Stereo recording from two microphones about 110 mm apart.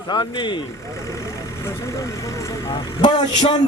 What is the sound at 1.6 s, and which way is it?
Speech, 30° left (ahead or behind).